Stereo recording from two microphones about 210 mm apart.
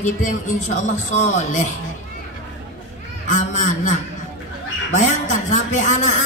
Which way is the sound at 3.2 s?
35° left (ahead or behind).